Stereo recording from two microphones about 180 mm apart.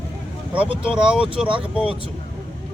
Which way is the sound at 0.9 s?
5° right (ahead or behind).